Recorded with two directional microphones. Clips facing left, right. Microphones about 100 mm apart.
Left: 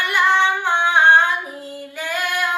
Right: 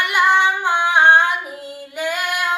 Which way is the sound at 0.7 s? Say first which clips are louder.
Right 1 dB; 15° right (ahead or behind).